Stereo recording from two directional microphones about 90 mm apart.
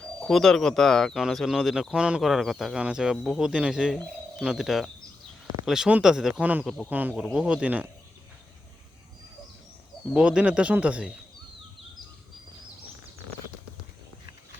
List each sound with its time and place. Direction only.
0.0 s speech: 5° left (ahead or behind); by 7.9 s 15° right (ahead or behind)
10.2 s speech: 10° right (ahead or behind)